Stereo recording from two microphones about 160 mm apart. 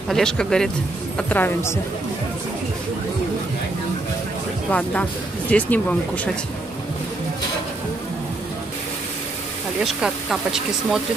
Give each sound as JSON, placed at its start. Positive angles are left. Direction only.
{"t": 0.1, "sound": "speech", "side_deg": 5}
{"t": 4.6, "sound": "speech", "side_deg": 10}
{"t": 9.8, "sound": "speech", "side_deg": 0}